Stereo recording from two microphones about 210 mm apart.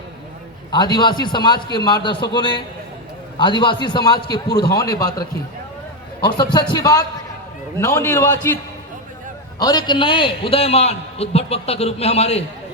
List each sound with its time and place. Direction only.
0.7 s a man's voice: 20° left (ahead or behind)
6.2 s a man's voice: 20° left (ahead or behind)
9.6 s a man's voice: 20° left (ahead or behind)